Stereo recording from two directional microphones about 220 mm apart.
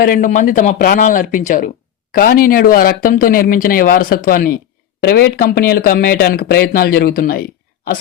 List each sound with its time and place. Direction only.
0.0 s speech: 40° left (ahead or behind)